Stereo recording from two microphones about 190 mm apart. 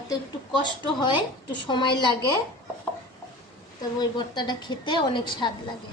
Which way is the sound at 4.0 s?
25° left (ahead or behind).